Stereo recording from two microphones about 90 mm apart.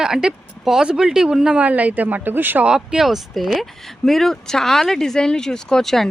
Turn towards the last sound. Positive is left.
turn(degrees=5)  # may be behind; listen again after turning